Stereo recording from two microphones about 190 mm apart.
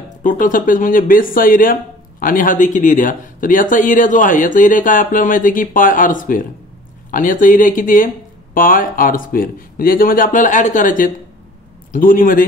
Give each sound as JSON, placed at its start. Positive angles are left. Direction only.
{"t": 0.2, "sound": "speech", "side_deg": 45}